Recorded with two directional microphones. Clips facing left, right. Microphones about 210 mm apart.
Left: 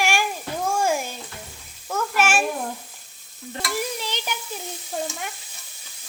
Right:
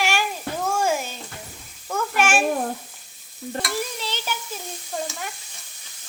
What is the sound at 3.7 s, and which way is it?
Stir, 15° left (ahead or behind).